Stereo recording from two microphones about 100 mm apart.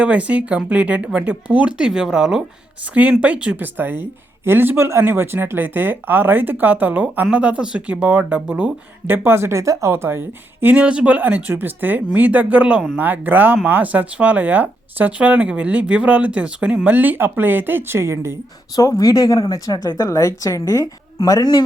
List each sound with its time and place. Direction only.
0.0 s speech: 15° right (ahead or behind)
18.8 s a woman's voice: 35° left (ahead or behind)